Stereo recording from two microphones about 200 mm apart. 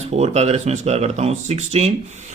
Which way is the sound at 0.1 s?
30° right (ahead or behind).